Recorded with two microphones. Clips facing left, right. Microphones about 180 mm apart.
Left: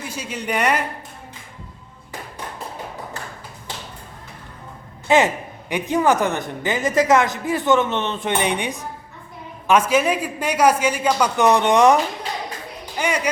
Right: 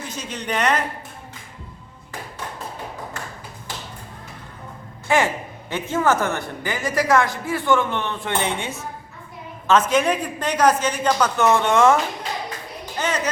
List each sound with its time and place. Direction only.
0.0 s speech: 10° left (ahead or behind)
5.0 s a man's voice: 20° left (ahead or behind)
13.0 s speech: 10° left (ahead or behind)